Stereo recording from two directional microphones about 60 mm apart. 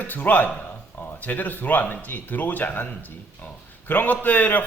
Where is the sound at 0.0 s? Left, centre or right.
Left.